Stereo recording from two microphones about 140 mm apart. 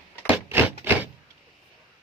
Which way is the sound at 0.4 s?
15° right (ahead or behind).